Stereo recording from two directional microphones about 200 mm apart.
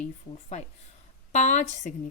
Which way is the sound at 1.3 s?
35° left (ahead or behind).